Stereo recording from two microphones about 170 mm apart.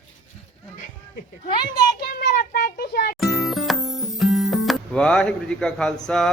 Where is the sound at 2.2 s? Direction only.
60° left (ahead or behind).